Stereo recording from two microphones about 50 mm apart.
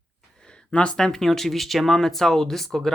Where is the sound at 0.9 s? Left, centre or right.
Centre.